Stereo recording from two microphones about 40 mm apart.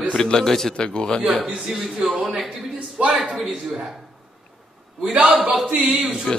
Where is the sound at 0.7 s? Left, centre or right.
Left.